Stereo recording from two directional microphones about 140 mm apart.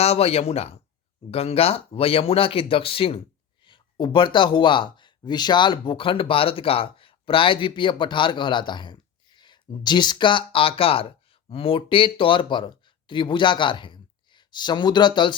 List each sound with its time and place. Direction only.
0.0 s speech: 45° left (ahead or behind)